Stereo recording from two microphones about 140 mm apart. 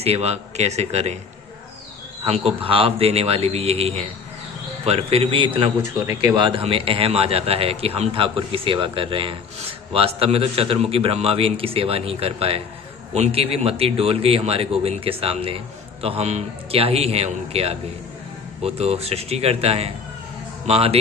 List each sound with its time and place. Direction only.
0.0 s a man's voice: 50° right (ahead or behind)
2.2 s a man's voice: 45° right (ahead or behind)
5.8 s speech: 15° right (ahead or behind)
6.3 s a man's voice: 40° right (ahead or behind)